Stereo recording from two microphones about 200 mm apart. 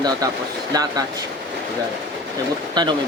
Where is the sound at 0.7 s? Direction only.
20° right (ahead or behind).